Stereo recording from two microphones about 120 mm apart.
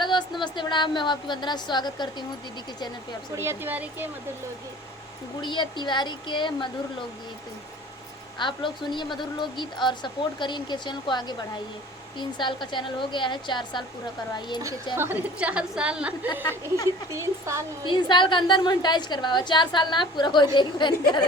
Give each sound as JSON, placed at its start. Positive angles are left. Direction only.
{"t": 0.0, "sound": "a sound", "side_deg": 40}
{"t": 0.4, "sound": "a woman's voice", "side_deg": 40}
{"t": 3.3, "sound": "a woman's voice", "side_deg": -20}
{"t": 5.4, "sound": "a woman's voice", "side_deg": 40}
{"t": 8.4, "sound": "a woman's voice", "side_deg": 40}
{"t": 14.9, "sound": "speech", "side_deg": -20}
{"t": 15.4, "sound": "a woman's voice", "side_deg": -10}
{"t": 17.1, "sound": "speech", "side_deg": -25}
{"t": 17.8, "sound": "a woman's voice", "side_deg": 40}